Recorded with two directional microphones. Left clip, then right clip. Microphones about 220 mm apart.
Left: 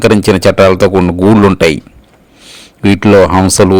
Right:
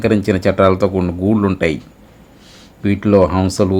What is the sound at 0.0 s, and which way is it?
Speech, 45° left (ahead or behind).